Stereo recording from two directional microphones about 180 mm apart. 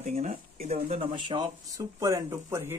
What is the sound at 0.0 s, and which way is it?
Speech, 40° right (ahead or behind).